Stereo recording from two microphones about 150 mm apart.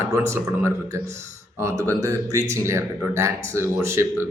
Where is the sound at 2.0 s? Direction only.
20° right (ahead or behind).